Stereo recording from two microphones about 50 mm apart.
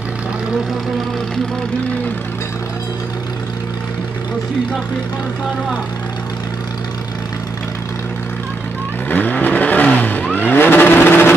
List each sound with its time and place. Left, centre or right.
9.1 s vehicle: left